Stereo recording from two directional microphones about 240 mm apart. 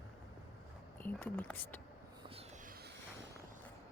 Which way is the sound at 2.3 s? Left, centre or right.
Right.